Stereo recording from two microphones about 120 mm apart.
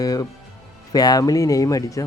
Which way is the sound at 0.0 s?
30° left (ahead or behind).